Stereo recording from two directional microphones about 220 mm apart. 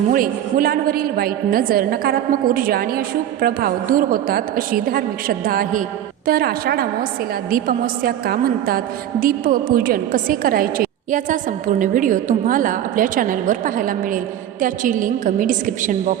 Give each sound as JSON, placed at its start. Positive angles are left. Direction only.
{"t": 0.1, "sound": "a woman's voice", "side_deg": -40}